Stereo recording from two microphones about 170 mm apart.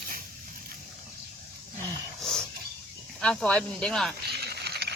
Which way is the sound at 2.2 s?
Centre (ahead or behind).